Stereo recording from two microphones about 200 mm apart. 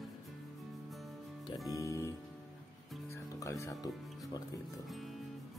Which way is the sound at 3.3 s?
15° left (ahead or behind).